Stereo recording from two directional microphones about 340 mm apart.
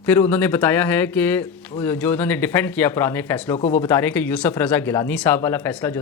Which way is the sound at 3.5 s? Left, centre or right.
Centre.